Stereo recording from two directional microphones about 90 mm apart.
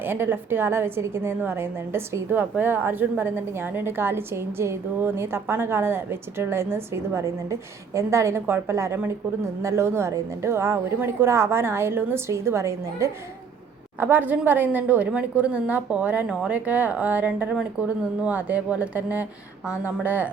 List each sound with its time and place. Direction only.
0.0 s a woman's voice: 25° right (ahead or behind)
14.0 s a woman's voice: 20° right (ahead or behind)